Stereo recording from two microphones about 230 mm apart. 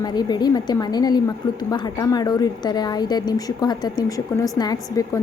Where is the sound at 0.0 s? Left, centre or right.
Centre.